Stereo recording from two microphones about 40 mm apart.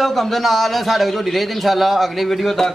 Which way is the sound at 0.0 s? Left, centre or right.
Centre.